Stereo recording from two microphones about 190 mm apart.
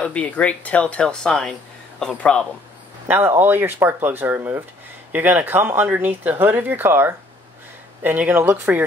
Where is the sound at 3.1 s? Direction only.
10° right (ahead or behind).